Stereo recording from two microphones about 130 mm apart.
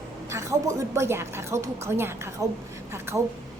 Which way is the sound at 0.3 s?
20° right (ahead or behind).